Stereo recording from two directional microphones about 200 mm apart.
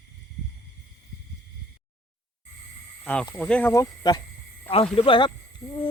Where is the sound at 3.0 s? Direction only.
10° left (ahead or behind).